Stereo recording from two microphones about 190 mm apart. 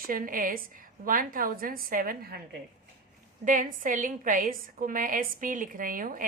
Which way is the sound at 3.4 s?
45° right (ahead or behind).